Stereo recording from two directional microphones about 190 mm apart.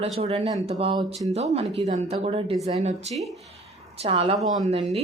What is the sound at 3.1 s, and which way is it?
Speech, centre (ahead or behind).